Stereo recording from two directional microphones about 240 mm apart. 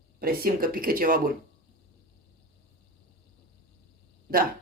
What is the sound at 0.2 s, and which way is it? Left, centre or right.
Speech, right.